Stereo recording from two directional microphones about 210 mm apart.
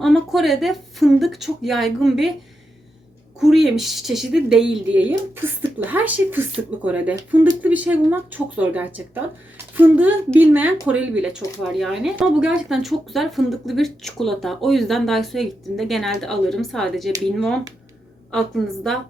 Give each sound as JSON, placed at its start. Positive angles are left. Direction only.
{"t": 0.0, "sound": "speech", "side_deg": 0}
{"t": 3.4, "sound": "speech", "side_deg": 0}
{"t": 18.3, "sound": "speech", "side_deg": 0}